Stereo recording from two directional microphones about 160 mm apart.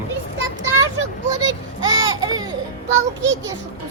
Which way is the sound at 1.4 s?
25° right (ahead or behind).